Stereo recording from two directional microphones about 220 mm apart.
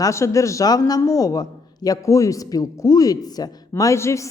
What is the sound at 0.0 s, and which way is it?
A man's voice, 15° left (ahead or behind).